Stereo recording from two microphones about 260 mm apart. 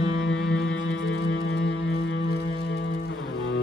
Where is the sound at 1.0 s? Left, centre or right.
Left.